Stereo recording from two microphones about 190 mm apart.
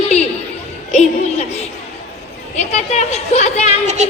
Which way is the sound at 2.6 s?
35° left (ahead or behind).